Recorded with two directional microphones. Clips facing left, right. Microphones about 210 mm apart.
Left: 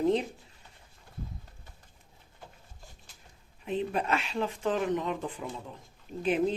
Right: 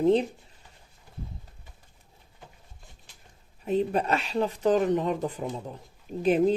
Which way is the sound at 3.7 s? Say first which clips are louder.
Right 5 dB; 40° right (ahead or behind).